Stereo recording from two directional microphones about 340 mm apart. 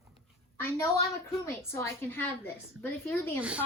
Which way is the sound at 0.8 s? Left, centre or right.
Centre.